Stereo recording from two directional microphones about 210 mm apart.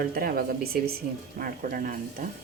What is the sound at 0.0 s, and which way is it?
Speech, 45° right (ahead or behind).